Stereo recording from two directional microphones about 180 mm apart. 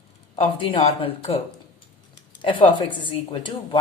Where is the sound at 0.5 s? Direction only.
30° left (ahead or behind).